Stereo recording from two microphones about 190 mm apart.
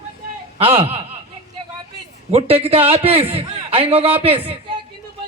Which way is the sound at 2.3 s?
30° right (ahead or behind).